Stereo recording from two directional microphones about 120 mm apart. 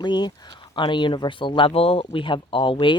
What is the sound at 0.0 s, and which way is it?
Speech, 35° left (ahead or behind).